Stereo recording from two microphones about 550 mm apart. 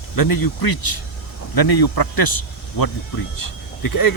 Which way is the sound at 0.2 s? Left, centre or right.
Left.